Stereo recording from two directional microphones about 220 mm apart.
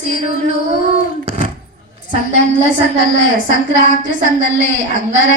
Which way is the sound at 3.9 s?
35° right (ahead or behind).